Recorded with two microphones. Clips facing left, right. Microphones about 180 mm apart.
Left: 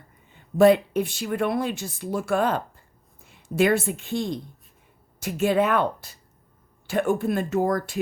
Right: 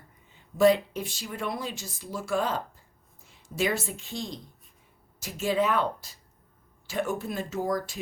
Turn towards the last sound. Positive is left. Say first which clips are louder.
# left 6 dB
turn(degrees=55)  # may be behind; listen again after turning